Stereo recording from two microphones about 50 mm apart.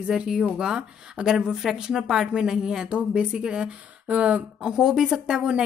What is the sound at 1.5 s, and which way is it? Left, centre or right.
Speech, centre.